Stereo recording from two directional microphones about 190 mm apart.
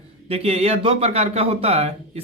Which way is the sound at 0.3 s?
30° right (ahead or behind).